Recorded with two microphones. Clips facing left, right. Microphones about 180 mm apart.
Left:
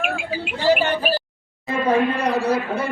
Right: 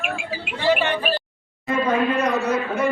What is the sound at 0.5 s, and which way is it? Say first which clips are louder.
Speech: left 1 dB; 40° left (ahead or behind).